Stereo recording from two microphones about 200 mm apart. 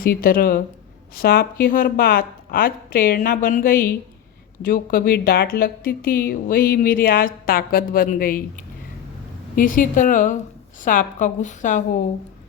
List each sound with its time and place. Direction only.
0.0 s a woman's voice: 45° left (ahead or behind)